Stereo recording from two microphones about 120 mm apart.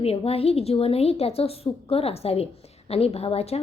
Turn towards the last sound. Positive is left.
turn(degrees=60)  # may be behind; listen again after turning